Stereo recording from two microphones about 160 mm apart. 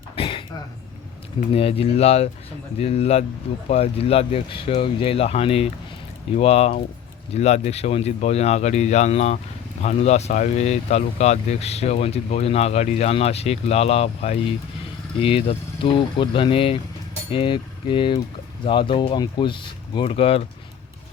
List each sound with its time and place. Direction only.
0.2 s throat clearing: 35° left (ahead or behind)
1.5 s speech: 40° left (ahead or behind)